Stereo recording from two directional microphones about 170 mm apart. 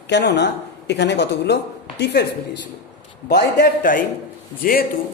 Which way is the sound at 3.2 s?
75° left (ahead or behind).